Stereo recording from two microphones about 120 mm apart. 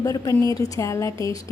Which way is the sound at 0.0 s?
30° left (ahead or behind).